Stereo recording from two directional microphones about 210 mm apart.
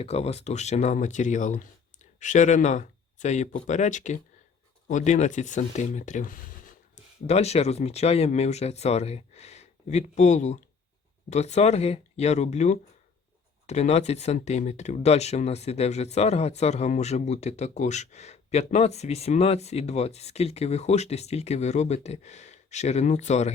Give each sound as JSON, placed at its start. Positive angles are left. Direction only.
{"t": 0.0, "sound": "speech", "side_deg": 30}